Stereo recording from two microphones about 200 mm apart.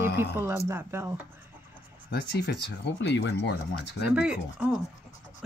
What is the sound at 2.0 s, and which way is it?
Speech, 55° left (ahead or behind).